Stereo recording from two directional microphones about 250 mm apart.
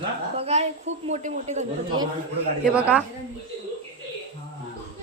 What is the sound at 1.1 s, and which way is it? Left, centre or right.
Speech, right.